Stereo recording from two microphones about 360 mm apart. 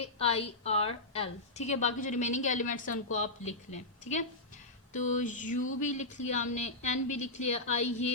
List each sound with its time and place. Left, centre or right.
0.0 s a woman's voice: centre
4.9 s a woman's voice: centre